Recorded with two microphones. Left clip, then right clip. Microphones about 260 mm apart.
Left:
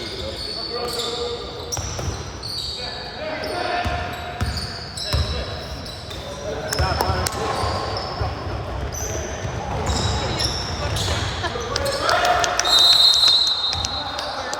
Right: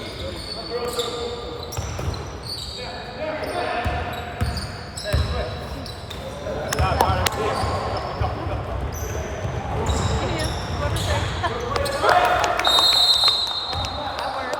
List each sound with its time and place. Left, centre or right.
6.7 s basketball bounce: right
11.7 s basketball bounce: right